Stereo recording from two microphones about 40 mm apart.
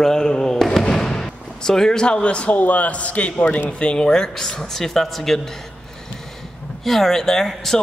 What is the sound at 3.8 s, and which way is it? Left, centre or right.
A man's voice, left.